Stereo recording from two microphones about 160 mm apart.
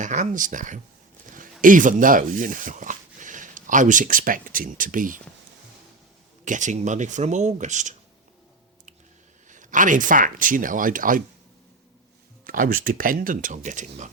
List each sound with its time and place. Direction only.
0.0 s speech: 50° right (ahead or behind)
6.4 s speech: 50° right (ahead or behind)
9.5 s speech: 50° right (ahead or behind)
12.5 s speech: 60° right (ahead or behind)